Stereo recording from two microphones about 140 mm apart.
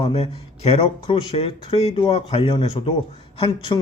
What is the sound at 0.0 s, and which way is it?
A man's voice, 45° left (ahead or behind).